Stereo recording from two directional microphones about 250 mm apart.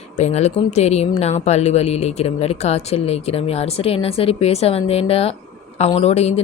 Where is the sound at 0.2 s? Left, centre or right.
Left.